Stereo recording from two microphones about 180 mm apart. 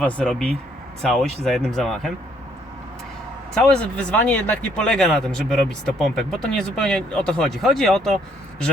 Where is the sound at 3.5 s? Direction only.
5° left (ahead or behind).